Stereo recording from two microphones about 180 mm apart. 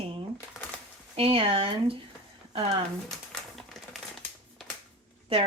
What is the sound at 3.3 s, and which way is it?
Typewriter, centre (ahead or behind).